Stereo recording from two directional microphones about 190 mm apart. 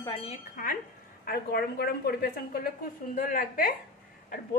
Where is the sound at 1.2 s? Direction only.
55° left (ahead or behind).